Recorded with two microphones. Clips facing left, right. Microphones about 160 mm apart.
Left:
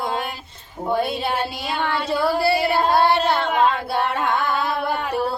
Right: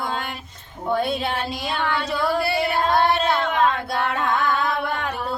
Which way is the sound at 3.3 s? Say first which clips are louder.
Left 1 dB; 30° left (ahead or behind).